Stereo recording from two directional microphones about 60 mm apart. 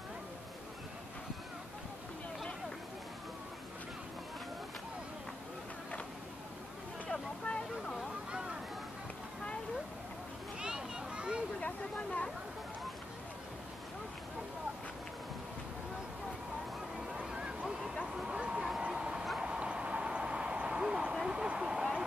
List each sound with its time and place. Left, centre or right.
7.1 s vehicle: centre
8.3 s a sound: centre
10.6 s children playing: centre
11.6 s chatter: left
17.1 s a sound: centre
19.4 s vehicle: centre